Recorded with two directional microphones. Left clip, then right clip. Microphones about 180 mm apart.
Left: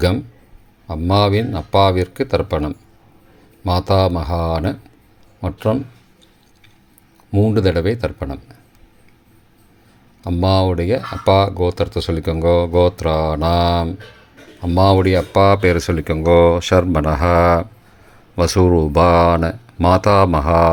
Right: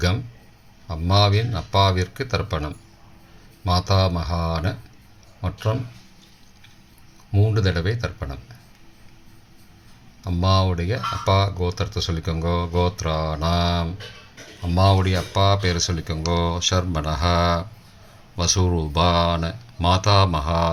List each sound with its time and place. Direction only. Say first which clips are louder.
0.9 s speech: left 5 dB; 35° left (ahead or behind)
7.3 s speech: left 8 dB; 40° left (ahead or behind)
10.2 s speech: left 6 dB; 40° left (ahead or behind)
15.9 s speech: left 12 dB; 30° left (ahead or behind)
18.4 s speech: left 8 dB; 20° left (ahead or behind)
19.0 s speech: left 6 dB; 40° left (ahead or behind)